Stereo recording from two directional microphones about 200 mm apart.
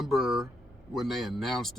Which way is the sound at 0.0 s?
Centre (ahead or behind).